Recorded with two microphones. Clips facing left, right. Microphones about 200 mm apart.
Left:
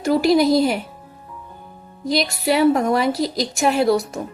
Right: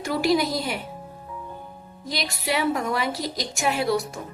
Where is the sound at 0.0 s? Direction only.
40° left (ahead or behind).